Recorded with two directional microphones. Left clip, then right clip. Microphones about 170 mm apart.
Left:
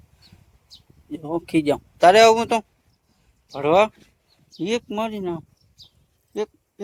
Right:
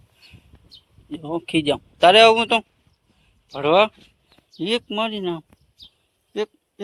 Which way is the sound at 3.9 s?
90° left.